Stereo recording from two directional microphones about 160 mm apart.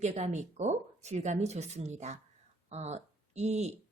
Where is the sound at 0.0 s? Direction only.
45° right (ahead or behind).